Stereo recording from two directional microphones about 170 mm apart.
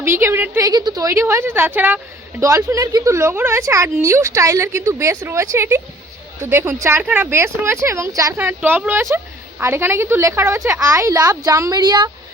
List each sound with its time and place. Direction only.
0.0 s speech: 15° right (ahead or behind)